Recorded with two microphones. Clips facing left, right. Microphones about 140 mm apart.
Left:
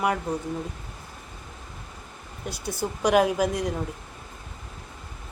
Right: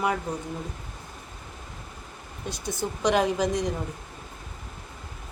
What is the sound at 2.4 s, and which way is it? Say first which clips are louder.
Speech: left 1 dB; 10° left (ahead or behind).